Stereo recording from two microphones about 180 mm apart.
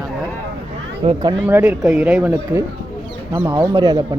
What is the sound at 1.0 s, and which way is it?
Speech, 30° right (ahead or behind).